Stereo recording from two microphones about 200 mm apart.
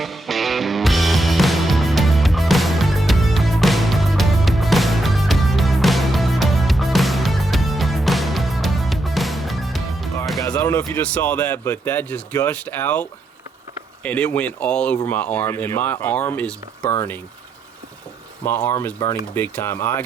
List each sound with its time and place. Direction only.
0.0 s music: centre (ahead or behind)
10.4 s speech: 10° left (ahead or behind)
18.4 s speech: 10° left (ahead or behind)